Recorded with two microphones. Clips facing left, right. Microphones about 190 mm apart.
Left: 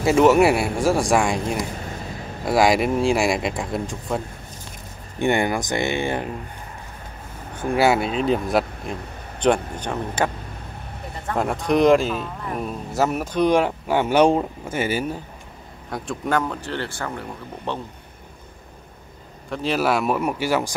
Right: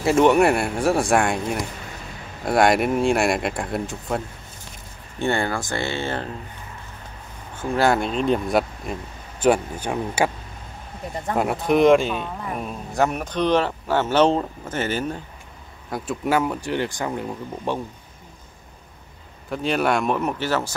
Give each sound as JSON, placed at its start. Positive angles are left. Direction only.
{"t": 0.0, "sound": "speech", "side_deg": 0}
{"t": 5.2, "sound": "speech", "side_deg": 15}
{"t": 7.5, "sound": "speech", "side_deg": 10}
{"t": 11.3, "sound": "speech", "side_deg": -5}
{"t": 15.9, "sound": "speech", "side_deg": -5}
{"t": 19.5, "sound": "speech", "side_deg": 0}